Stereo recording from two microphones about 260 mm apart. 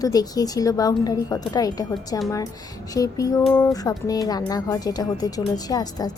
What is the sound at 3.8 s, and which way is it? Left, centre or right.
A woman's voice, centre.